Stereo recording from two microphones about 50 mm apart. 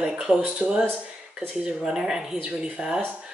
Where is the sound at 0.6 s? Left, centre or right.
Right.